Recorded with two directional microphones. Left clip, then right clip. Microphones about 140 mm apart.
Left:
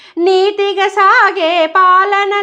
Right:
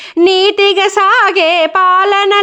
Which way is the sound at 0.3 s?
30° right (ahead or behind).